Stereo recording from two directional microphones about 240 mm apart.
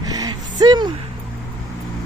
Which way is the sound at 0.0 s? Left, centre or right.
Centre.